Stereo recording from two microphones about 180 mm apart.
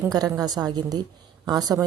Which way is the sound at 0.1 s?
20° right (ahead or behind).